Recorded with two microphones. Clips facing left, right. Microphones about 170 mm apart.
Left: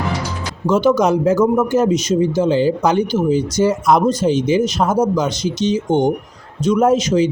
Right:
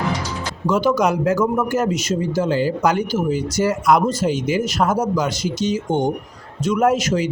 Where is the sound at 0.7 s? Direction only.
25° left (ahead or behind).